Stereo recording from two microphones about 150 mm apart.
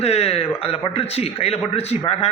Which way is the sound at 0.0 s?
45° left (ahead or behind).